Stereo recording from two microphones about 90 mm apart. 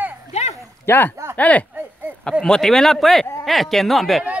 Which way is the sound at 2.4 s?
5° left (ahead or behind).